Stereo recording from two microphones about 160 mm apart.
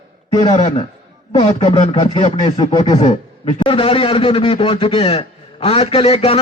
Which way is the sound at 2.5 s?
25° left (ahead or behind).